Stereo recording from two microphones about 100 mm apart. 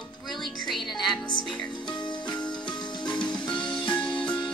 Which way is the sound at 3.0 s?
10° left (ahead or behind).